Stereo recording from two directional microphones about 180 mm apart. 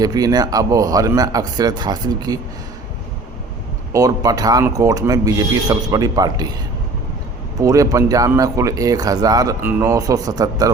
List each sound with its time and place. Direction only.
0.0 s speech: 20° right (ahead or behind)
3.9 s speech: 20° right (ahead or behind)
7.6 s speech: 15° right (ahead or behind)